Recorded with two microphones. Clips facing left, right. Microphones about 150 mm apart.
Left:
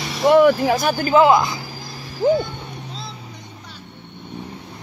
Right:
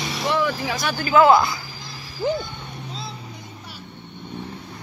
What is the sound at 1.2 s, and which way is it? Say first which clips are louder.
Speech: even; 15° left (ahead or behind).